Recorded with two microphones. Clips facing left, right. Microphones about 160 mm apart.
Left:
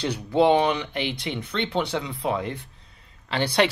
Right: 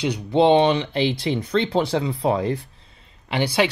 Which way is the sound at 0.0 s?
20° right (ahead or behind).